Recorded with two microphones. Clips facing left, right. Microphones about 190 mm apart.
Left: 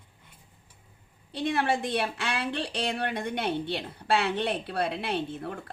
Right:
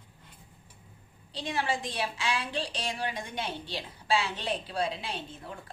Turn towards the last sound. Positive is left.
turn(degrees=60)  # may be behind; listen again after turning